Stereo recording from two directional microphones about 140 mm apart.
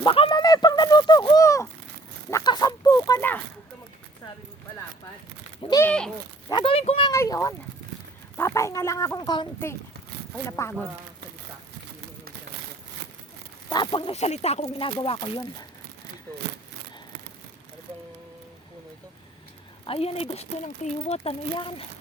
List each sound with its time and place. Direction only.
0.0 s a sound: 35° left (ahead or behind)
2.3 s duck: 30° left (ahead or behind)
3.2 s speech: 15° left (ahead or behind)
5.6 s speech: 35° left (ahead or behind)
7.1 s speech: 20° left (ahead or behind)
10.5 s speech: 15° left (ahead or behind)
13.7 s speech: 30° left (ahead or behind)
14.1 s speech: 50° left (ahead or behind)
19.8 s speech: 45° left (ahead or behind)